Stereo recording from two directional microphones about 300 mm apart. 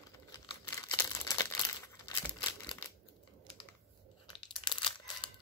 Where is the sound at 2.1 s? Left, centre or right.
Centre.